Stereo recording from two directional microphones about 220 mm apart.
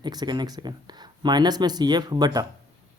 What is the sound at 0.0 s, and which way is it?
Speech, 20° right (ahead or behind).